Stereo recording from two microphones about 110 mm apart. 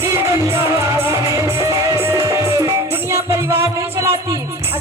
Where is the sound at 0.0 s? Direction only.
25° right (ahead or behind).